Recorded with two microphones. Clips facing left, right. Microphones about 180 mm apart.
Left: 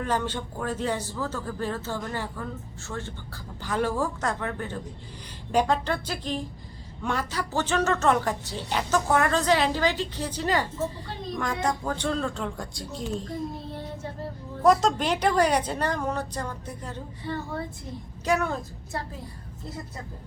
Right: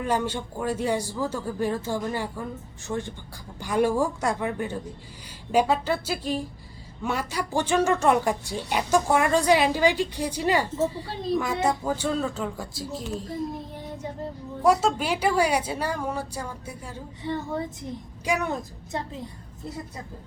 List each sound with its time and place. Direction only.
0.0 s speech: 10° right (ahead or behind)
13.7 s a woman's voice: 15° right (ahead or behind)